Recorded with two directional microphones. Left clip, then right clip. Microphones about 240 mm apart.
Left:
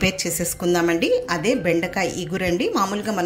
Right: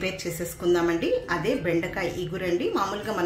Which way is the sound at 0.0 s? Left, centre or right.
Left.